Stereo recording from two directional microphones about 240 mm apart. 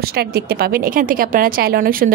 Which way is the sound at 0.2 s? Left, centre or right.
Right.